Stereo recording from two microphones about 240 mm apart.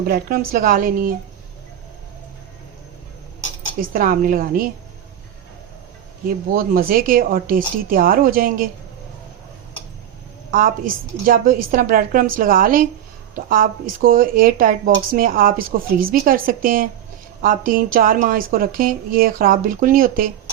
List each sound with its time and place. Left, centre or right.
0.0 s speech: right
3.9 s speech: right
6.5 s speech: right
11.3 s speech: right